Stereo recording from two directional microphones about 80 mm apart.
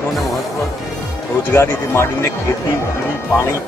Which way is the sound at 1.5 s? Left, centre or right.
Left.